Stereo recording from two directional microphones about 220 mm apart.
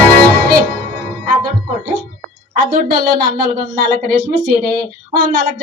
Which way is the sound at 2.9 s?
45° right (ahead or behind).